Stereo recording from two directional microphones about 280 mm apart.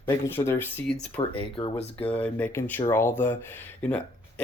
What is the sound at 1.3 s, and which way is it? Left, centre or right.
Speech, centre.